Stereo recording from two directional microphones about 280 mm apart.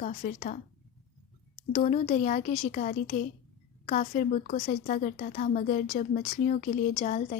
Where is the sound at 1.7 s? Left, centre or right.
Left.